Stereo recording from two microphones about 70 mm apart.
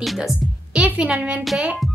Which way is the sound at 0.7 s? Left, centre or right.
Centre.